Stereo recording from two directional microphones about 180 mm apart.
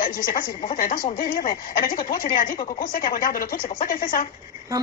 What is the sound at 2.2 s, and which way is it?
Speech, 50° left (ahead or behind).